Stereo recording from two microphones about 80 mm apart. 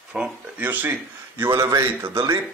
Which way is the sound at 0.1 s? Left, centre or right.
Centre.